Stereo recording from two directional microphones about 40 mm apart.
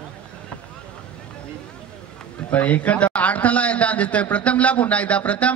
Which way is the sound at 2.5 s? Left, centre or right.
Left.